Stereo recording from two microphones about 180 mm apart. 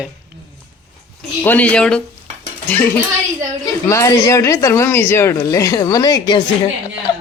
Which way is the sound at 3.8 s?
15° left (ahead or behind).